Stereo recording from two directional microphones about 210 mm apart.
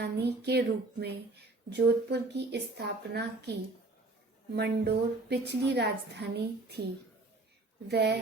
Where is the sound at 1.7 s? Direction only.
55° right (ahead or behind).